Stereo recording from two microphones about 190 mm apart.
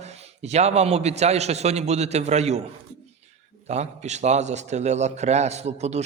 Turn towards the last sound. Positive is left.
turn(degrees=-35)  # may be behind; listen again after turning